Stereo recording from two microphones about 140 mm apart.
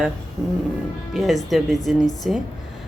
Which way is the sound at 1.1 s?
Centre (ahead or behind).